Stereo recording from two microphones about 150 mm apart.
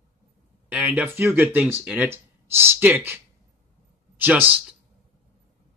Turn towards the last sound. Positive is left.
turn(degrees=-10)  # may be behind; listen again after turning